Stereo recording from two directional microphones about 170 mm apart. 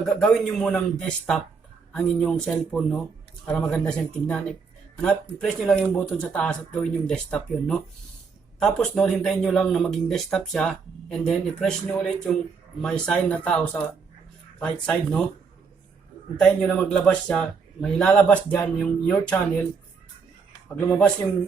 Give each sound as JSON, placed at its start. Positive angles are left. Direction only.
{"t": 0.0, "sound": "a man's voice", "side_deg": 5}
{"t": 16.4, "sound": "a man's voice", "side_deg": 5}
{"t": 20.7, "sound": "a man's voice", "side_deg": 10}